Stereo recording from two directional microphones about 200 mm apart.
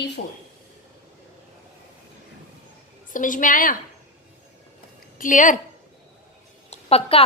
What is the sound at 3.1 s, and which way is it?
Speech, 40° left (ahead or behind).